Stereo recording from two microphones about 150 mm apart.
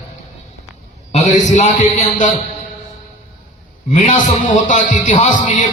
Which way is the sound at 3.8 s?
50° left (ahead or behind).